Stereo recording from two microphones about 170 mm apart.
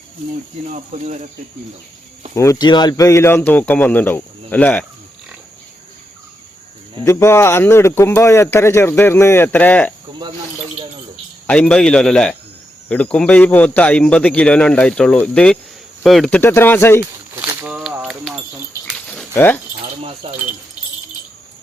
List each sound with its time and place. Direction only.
0.7 s speech: 45° right (ahead or behind)
2.3 s speech: 20° left (ahead or behind)
7.0 s speech: 15° left (ahead or behind)
11.4 s a man's voice: 5° left (ahead or behind)
16.4 s speech: 15° left (ahead or behind)
17.3 s a sound: 10° right (ahead or behind)
19.3 s speech: 10° left (ahead or behind)
20.0 s speech: 35° right (ahead or behind)